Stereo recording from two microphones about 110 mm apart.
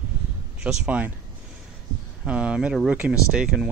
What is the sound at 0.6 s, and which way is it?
Speech, 10° right (ahead or behind).